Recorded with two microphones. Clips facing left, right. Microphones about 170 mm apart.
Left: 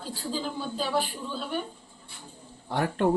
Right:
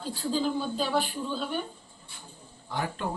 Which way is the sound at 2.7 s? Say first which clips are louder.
Left 6 dB; 60° left (ahead or behind).